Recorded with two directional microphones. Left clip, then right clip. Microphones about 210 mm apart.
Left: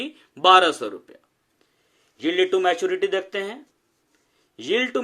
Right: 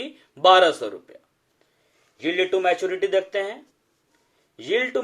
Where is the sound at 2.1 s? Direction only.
40° left (ahead or behind).